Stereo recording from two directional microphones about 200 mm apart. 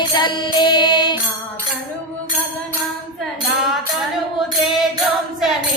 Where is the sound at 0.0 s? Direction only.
20° left (ahead or behind).